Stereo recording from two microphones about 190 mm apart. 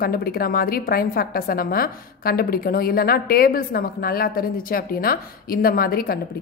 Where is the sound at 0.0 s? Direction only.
50° left (ahead or behind).